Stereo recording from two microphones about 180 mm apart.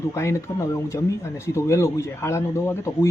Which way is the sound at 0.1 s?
15° left (ahead or behind).